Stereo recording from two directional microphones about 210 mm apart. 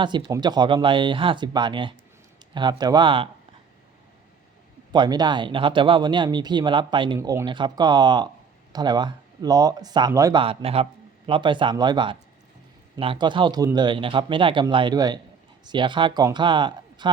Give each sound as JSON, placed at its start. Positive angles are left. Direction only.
{"t": 0.0, "sound": "speech", "side_deg": -20}
{"t": 4.9, "sound": "speech", "side_deg": -20}